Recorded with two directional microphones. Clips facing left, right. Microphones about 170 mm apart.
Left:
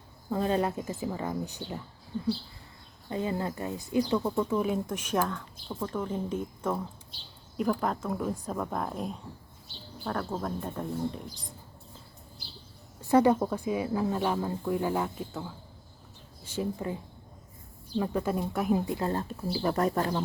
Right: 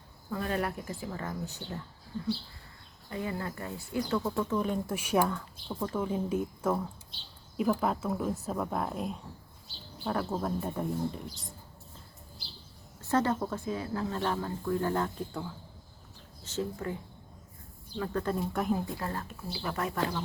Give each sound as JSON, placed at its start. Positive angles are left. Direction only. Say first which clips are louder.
{"t": 0.3, "sound": "speech", "louder": "left 5 dB", "side_deg": 25}
{"t": 3.1, "sound": "speech", "louder": "left 4 dB", "side_deg": 25}
{"t": 4.9, "sound": "speech", "louder": "right 2 dB", "side_deg": -10}
{"t": 13.0, "sound": "speech", "louder": "left 6 dB", "side_deg": 15}
{"t": 18.9, "sound": "speech", "louder": "left 6 dB", "side_deg": 25}